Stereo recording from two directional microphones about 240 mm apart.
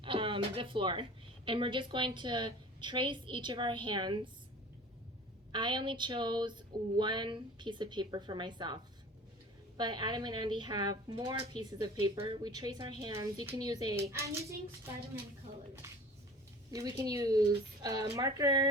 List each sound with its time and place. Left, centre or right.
0.0 s a sound: right
1.5 s a woman's voice: right
5.5 s a woman's voice: centre
16.7 s a woman's voice: centre